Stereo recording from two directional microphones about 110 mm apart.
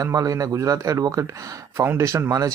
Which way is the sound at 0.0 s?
30° right (ahead or behind).